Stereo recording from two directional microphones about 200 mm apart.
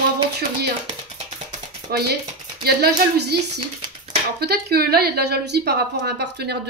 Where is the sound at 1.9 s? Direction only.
55° right (ahead or behind).